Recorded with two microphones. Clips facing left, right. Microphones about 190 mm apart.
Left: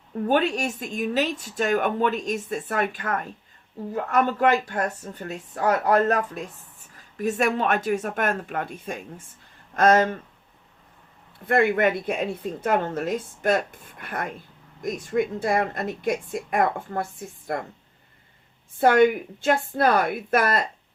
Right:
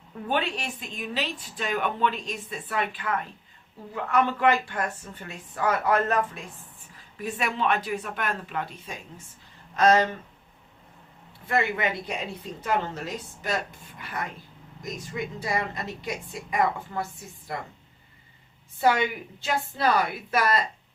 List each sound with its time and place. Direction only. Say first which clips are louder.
0.3 s speech: left 6 dB; 45° left (ahead or behind)
11.4 s speech: left 6 dB; 55° left (ahead or behind)
18.8 s speech: left 6 dB; 55° left (ahead or behind)